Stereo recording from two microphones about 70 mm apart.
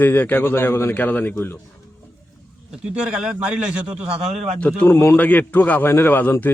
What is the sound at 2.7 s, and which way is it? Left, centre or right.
A man's voice, centre.